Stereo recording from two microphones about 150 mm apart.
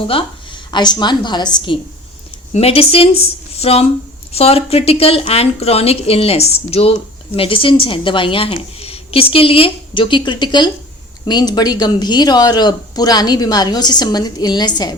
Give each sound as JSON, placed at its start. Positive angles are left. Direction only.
{"t": 0.7, "sound": "speech", "side_deg": 30}
{"t": 2.5, "sound": "a woman's voice", "side_deg": 45}